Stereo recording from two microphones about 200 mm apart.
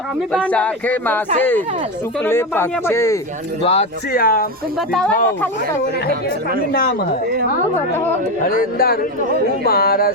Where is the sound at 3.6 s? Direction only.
30° left (ahead or behind).